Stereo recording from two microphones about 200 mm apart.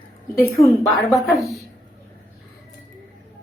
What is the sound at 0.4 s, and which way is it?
A woman's voice, centre (ahead or behind).